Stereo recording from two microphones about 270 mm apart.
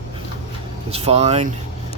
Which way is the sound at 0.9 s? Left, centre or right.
Right.